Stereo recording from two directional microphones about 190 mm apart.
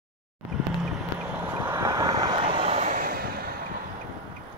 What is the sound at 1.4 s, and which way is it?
Vehicle, 10° right (ahead or behind).